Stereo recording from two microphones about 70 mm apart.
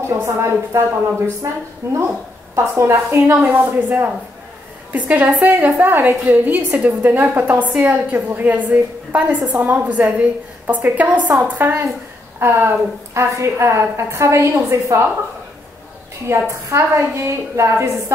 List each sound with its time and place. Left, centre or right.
0.0 s a woman's voice: right
2.5 s a woman's voice: right
3.5 s a woman's voice: right
16.3 s a woman's voice: right